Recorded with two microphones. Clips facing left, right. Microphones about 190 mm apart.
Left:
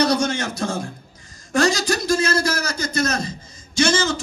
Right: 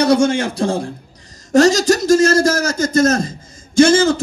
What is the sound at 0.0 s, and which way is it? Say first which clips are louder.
Speech: right 6 dB; 25° right (ahead or behind).